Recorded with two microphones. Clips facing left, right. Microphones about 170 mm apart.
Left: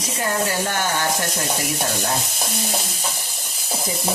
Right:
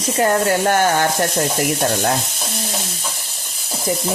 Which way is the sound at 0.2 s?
55° right (ahead or behind).